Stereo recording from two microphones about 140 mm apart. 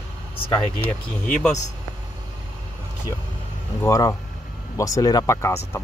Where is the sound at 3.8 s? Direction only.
25° left (ahead or behind).